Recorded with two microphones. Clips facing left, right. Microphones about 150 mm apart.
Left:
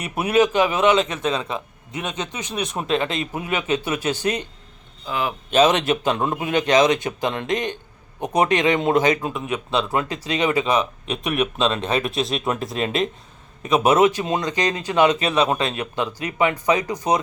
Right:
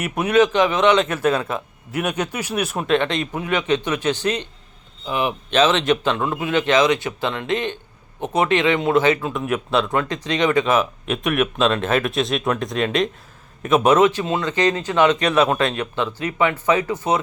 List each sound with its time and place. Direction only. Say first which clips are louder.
0.2 s speech: right 1 dB; 10° left (ahead or behind)
1.1 s speech: right 4 dB; 5° right (ahead or behind); by 4.4 s 10° left (ahead or behind)
5.0 s speech: right 3 dB; 20° right (ahead or behind)
5.5 s speech: left 1 dB; 10° left (ahead or behind)
6.1 s a man's voice: right 1 dB; 25° left (ahead or behind)
9.3 s speech: right 3 dB; centre (ahead or behind)
9.9 s speech: right 1 dB; 10° left (ahead or behind)
10.7 s speech: right 2 dB; centre (ahead or behind)
13.8 s speech: even; 10° left (ahead or behind)
15.8 s speech: right 2 dB; 10° left (ahead or behind)